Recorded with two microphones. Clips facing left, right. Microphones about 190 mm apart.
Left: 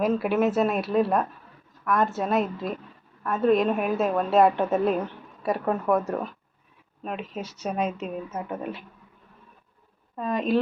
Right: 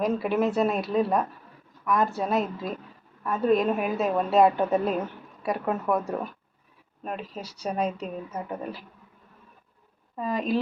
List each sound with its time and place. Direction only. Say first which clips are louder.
0.0 s a woman's voice: left 2 dB; centre (ahead or behind)
7.6 s a woman's voice: even; 5° left (ahead or behind)
10.2 s a woman's voice: left 2 dB; centre (ahead or behind)